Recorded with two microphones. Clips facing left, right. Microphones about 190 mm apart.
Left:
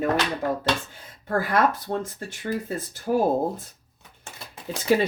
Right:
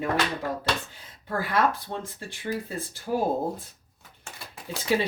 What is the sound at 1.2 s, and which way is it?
Speech, 50° left (ahead or behind).